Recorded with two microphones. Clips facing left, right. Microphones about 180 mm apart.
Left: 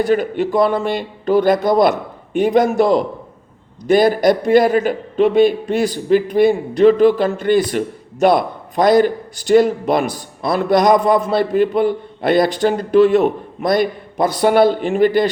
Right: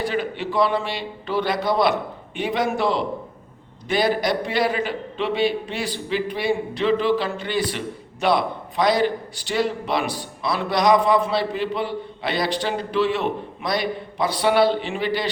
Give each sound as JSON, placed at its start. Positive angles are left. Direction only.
{"t": 0.0, "sound": "a man's voice", "side_deg": 45}